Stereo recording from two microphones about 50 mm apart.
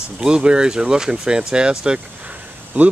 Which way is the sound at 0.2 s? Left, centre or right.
Centre.